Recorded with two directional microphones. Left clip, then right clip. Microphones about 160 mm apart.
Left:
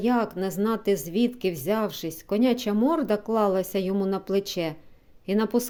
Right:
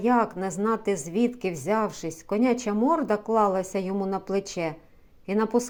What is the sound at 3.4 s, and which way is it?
A woman's voice, 50° left (ahead or behind).